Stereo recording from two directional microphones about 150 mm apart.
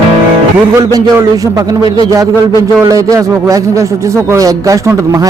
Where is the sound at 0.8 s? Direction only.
25° right (ahead or behind).